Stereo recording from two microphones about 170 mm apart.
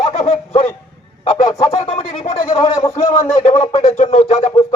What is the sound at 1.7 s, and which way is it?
Speech, 35° left (ahead or behind).